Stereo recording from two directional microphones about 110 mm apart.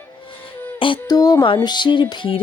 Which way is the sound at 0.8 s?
50° left (ahead or behind).